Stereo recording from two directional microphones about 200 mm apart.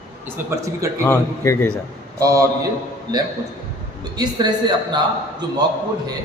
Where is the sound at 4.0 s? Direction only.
20° right (ahead or behind).